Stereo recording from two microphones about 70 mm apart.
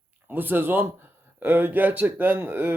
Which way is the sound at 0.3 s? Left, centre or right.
Right.